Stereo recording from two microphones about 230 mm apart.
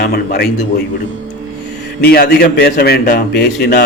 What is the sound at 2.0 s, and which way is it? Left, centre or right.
A man's voice, left.